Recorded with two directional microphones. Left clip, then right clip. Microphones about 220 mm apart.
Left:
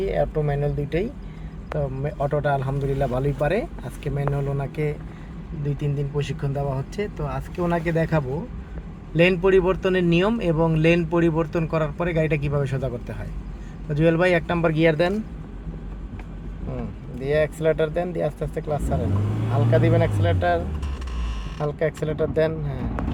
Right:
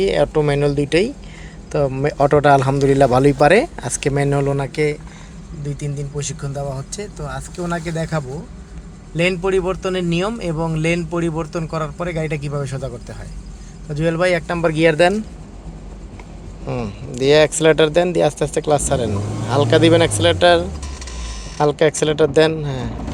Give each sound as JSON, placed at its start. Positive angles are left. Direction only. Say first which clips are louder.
{"t": 0.0, "sound": "a man's voice", "louder": "right 8 dB", "side_deg": -30}
{"t": 5.6, "sound": "speech", "louder": "even", "side_deg": 0}
{"t": 17.2, "sound": "a man's voice", "louder": "right 9 dB", "side_deg": -35}
{"t": 21.6, "sound": "a man's voice", "louder": "right 10 dB", "side_deg": -35}